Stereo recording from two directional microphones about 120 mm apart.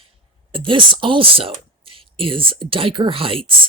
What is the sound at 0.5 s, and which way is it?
Speech, 45° right (ahead or behind).